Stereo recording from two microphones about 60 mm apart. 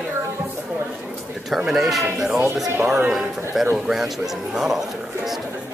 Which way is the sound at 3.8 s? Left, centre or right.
Centre.